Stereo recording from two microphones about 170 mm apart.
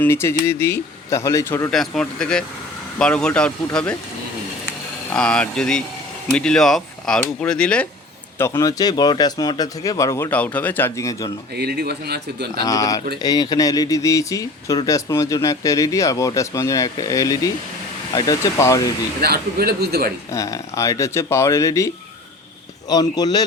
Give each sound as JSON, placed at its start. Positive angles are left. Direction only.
{"t": 0.0, "sound": "speech", "side_deg": 15}
{"t": 1.7, "sound": "speech", "side_deg": 5}
{"t": 5.1, "sound": "speech", "side_deg": 5}
{"t": 11.5, "sound": "speech", "side_deg": -70}
{"t": 12.6, "sound": "speech", "side_deg": 20}
{"t": 19.2, "sound": "speech", "side_deg": -65}
{"t": 20.3, "sound": "speech", "side_deg": 20}